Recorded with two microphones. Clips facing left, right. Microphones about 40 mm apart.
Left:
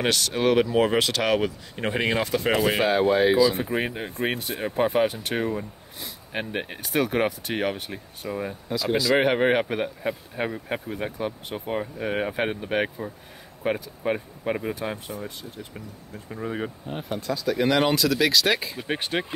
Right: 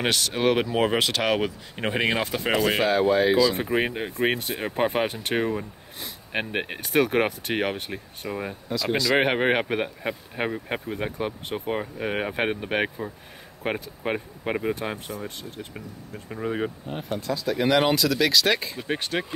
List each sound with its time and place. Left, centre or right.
0.0 s speech: right
2.6 s speech: centre
3.7 s speech: right
5.9 s speech: right
8.3 s speech: right
8.6 s speech: centre
9.1 s speech: right
14.1 s speech: right
14.8 s speech: right
16.4 s speech: right
17.3 s speech: centre
18.9 s speech: centre